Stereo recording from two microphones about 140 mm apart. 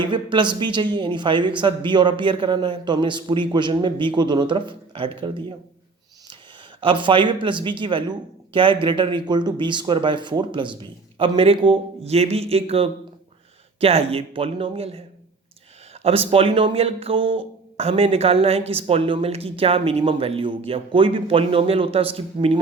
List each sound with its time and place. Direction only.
0.0 s a man's voice: 35° right (ahead or behind)
6.8 s a man's voice: 35° right (ahead or behind)
16.0 s speech: 45° right (ahead or behind)